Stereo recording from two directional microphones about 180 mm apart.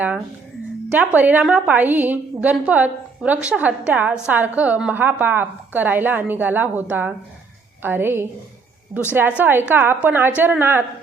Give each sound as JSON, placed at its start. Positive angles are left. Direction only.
{"t": 0.9, "sound": "a woman's voice", "side_deg": -10}
{"t": 9.4, "sound": "a woman's voice", "side_deg": -10}